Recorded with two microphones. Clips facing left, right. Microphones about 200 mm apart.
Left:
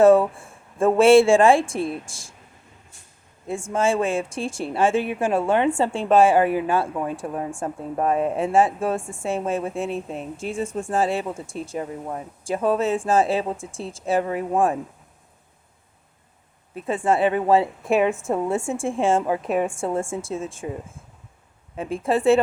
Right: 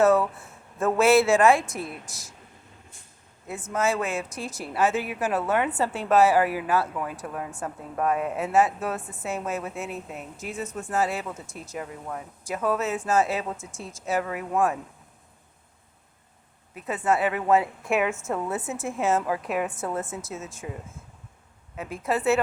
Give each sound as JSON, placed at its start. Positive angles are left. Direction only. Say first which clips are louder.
{"t": 0.0, "sound": "speech", "louder": "left 6 dB", "side_deg": 30}
{"t": 3.4, "sound": "speech", "louder": "left 4 dB", "side_deg": 25}
{"t": 16.7, "sound": "speech", "louder": "left 4 dB", "side_deg": 30}
{"t": 21.8, "sound": "speech", "louder": "left 5 dB", "side_deg": 30}